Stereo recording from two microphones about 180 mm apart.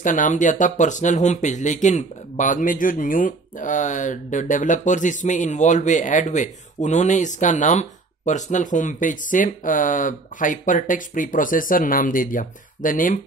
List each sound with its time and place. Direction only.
0.0 s speech: 45° left (ahead or behind)